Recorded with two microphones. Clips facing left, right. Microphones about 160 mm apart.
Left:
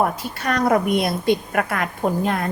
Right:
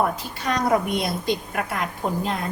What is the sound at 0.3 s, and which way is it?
A woman's voice, 60° left (ahead or behind).